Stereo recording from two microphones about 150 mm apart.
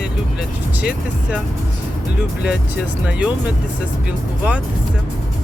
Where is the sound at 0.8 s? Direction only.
10° right (ahead or behind).